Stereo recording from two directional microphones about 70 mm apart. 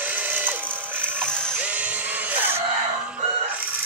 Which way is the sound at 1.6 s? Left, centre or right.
Right.